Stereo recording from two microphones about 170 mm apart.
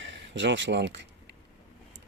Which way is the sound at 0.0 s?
90° right.